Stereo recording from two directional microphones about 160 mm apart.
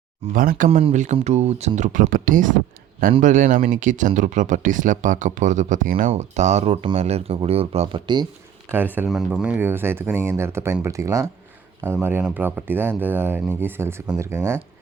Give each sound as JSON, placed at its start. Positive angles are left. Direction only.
{"t": 0.3, "sound": "speech", "side_deg": -55}
{"t": 0.7, "sound": "speech", "side_deg": -40}
{"t": 8.7, "sound": "speech", "side_deg": -10}